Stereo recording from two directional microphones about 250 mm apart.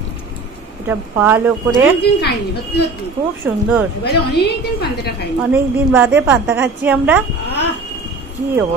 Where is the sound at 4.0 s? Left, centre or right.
Left.